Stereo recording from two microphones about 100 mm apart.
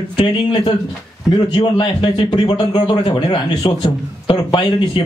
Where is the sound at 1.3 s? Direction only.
55° left (ahead or behind); by 2.4 s 70° left (ahead or behind).